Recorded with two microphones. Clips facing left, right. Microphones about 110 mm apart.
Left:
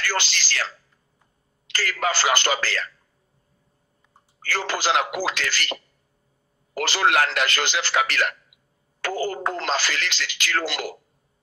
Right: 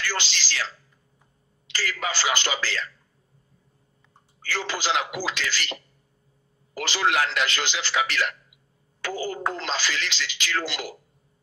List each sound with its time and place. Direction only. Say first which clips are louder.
0.0 s a man's voice: left 3 dB; 50° left (ahead or behind)
1.7 s a man's voice: left 4 dB; 50° left (ahead or behind)
4.4 s a man's voice: left 3 dB; 50° left (ahead or behind)